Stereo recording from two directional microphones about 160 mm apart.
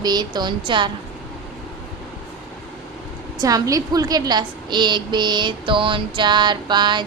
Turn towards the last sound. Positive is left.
turn(degrees=-30)  # may be behind; listen again after turning